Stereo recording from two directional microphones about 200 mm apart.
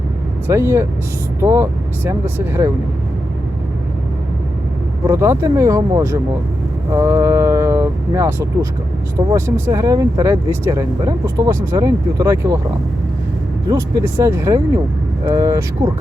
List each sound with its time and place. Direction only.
0.4 s speech: 10° right (ahead or behind)
5.0 s speech: 15° right (ahead or behind)
13.7 s speech: 15° right (ahead or behind)